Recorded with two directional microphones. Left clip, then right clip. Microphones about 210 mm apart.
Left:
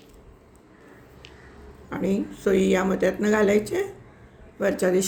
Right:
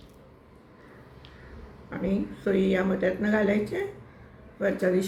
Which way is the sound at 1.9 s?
50° left (ahead or behind).